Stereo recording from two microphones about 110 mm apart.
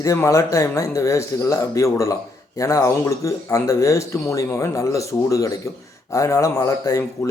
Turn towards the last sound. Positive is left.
turn(degrees=30)  # may be behind; listen again after turning